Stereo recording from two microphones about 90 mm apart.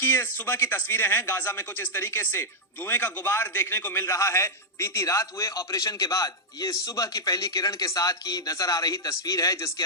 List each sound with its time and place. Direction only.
0.0 s a man's voice: 25° left (ahead or behind)